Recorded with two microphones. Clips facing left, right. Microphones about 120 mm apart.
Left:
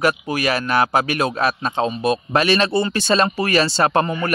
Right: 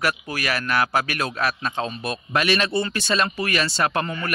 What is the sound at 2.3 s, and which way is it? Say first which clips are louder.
Speech: left 2 dB; 30° left (ahead or behind).